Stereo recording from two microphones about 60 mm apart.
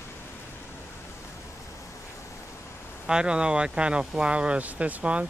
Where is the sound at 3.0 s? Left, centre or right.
Centre.